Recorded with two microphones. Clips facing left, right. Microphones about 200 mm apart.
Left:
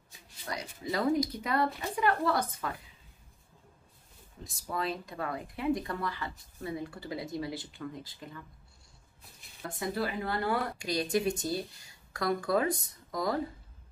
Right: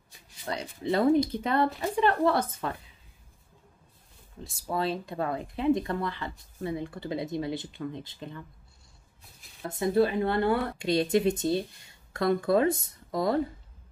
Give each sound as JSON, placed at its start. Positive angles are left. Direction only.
{"t": 0.5, "sound": "speech", "side_deg": -30}
{"t": 4.5, "sound": "speech", "side_deg": -30}
{"t": 9.6, "sound": "speech", "side_deg": -25}